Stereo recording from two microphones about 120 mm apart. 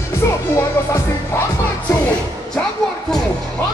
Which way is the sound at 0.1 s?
25° left (ahead or behind).